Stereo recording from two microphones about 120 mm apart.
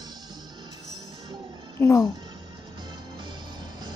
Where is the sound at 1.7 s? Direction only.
20° left (ahead or behind).